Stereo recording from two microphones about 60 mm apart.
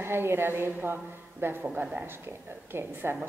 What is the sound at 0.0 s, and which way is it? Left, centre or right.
Speech, right.